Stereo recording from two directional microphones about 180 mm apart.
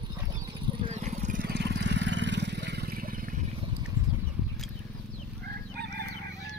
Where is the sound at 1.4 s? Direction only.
70° right (ahead or behind); by 3.4 s 50° right (ahead or behind).